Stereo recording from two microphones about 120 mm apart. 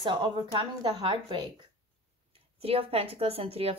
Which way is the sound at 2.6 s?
50° right (ahead or behind).